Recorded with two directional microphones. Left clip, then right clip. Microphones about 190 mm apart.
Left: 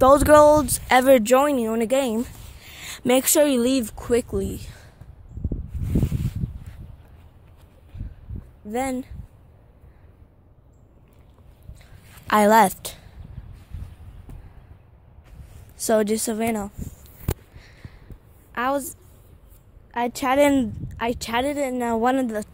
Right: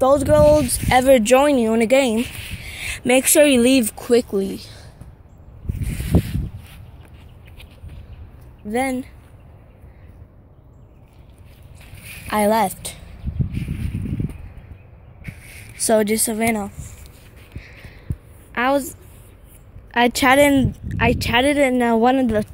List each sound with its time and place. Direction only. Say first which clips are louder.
0.0 s speech: left 1 dB; 30° left (ahead or behind)
1.4 s speech: right 5 dB; 5° left (ahead or behind)
2.9 s speech: right 3 dB; 15° left (ahead or behind)
6.0 s a sound: right 11 dB; centre (ahead or behind)
8.6 s speech: right 4 dB; 10° left (ahead or behind)
12.3 s speech: left 2 dB; 30° left (ahead or behind)
15.7 s speech: right 3 dB; 15° left (ahead or behind)
17.6 s a sound: right 8 dB; 10° left (ahead or behind)
18.5 s a woman's voice: right 5 dB; centre (ahead or behind)
20.3 s speech: right 4 dB; 10° left (ahead or behind)
21.5 s speech: right 7 dB; 10° right (ahead or behind)
22.2 s speech: right 7 dB; 10° right (ahead or behind)